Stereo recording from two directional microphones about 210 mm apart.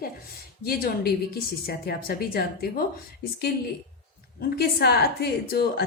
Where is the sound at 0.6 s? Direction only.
45° left (ahead or behind).